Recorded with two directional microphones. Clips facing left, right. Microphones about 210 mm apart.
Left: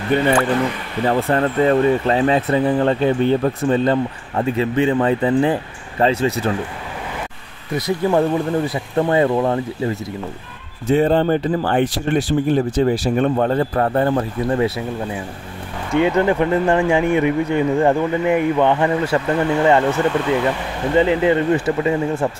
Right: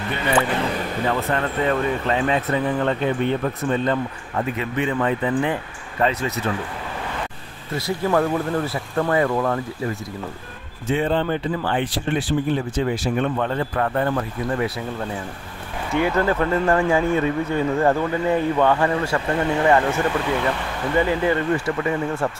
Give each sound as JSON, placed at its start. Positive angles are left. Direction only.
{"t": 0.1, "sound": "speech", "side_deg": 45}
{"t": 1.0, "sound": "speech", "side_deg": 35}
{"t": 7.7, "sound": "speech", "side_deg": 20}
{"t": 10.9, "sound": "speech", "side_deg": 40}
{"t": 15.9, "sound": "speech", "side_deg": 20}
{"t": 20.9, "sound": "speech", "side_deg": 20}